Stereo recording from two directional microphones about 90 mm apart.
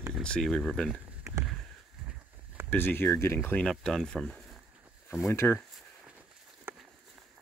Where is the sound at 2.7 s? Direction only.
25° left (ahead or behind).